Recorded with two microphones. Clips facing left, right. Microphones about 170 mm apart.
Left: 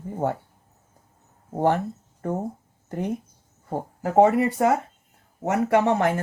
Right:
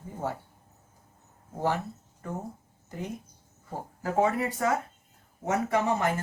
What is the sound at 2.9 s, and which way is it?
Speech, 55° left (ahead or behind).